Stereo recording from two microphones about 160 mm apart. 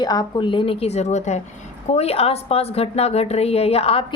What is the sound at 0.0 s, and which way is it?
A woman's voice, 25° left (ahead or behind).